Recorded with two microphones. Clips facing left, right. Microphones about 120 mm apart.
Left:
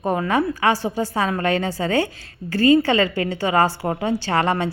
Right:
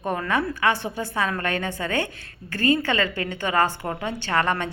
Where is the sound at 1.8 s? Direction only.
25° left (ahead or behind).